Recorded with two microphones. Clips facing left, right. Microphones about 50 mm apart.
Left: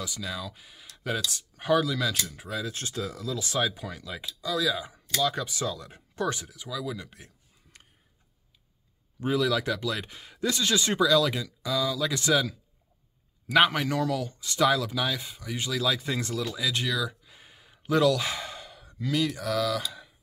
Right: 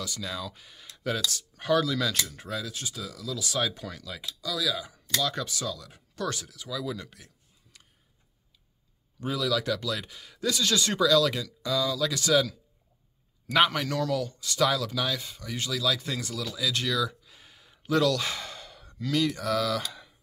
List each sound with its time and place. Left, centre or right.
0.2 s speech: centre
2.7 s speech: left
3.6 s speech: centre
6.7 s speech: centre
9.2 s speech: left
12.1 s speech: left
13.5 s speech: centre
16.2 s speech: left; by 19.8 s centre